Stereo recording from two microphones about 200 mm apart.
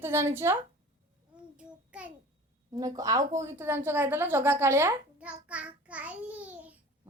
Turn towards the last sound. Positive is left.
turn(degrees=-5)  # may be behind; listen again after turning